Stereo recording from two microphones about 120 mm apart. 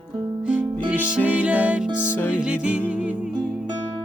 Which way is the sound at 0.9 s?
10° right (ahead or behind).